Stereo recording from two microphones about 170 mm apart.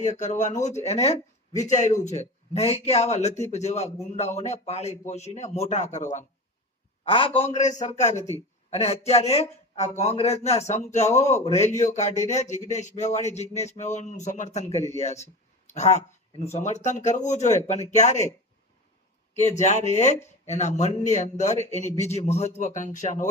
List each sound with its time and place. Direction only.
0.0 s a man's voice: 45° left (ahead or behind)
7.0 s a man's voice: 35° left (ahead or behind)
19.4 s a man's voice: 40° left (ahead or behind)